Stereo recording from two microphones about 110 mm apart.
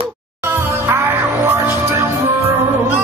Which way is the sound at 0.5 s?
20° right (ahead or behind).